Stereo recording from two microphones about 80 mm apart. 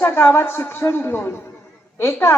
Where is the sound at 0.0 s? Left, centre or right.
Left.